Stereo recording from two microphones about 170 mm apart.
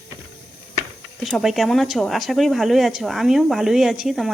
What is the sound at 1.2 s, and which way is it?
Speech, centre (ahead or behind).